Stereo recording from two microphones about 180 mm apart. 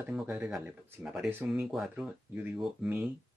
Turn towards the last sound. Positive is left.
turn(degrees=-5)  # may be behind; listen again after turning